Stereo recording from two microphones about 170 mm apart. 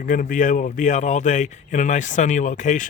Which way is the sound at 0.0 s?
55° left (ahead or behind).